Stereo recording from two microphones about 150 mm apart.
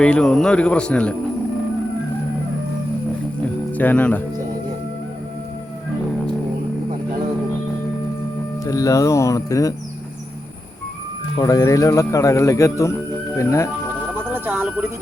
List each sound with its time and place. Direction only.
0.0 s speech: 5° left (ahead or behind)
3.4 s music: 10° left (ahead or behind)
8.6 s speech: 20° left (ahead or behind)
11.3 s speech: 20° left (ahead or behind)
14.2 s music: 15° right (ahead or behind)